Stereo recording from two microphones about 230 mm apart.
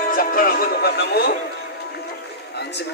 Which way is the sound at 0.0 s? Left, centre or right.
Left.